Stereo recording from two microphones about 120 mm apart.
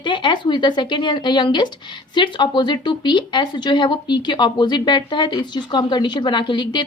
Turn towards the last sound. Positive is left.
turn(degrees=40)  # may be behind; listen again after turning